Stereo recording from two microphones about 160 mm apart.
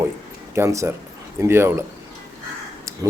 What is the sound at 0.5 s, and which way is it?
A man's voice, 15° right (ahead or behind).